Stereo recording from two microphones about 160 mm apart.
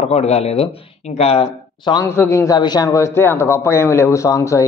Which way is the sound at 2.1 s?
15° left (ahead or behind).